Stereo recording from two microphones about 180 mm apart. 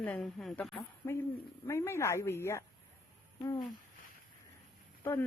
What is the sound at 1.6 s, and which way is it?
Speech, 15° left (ahead or behind).